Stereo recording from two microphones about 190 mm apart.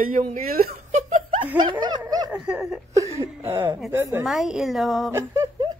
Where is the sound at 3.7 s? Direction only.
Centre (ahead or behind).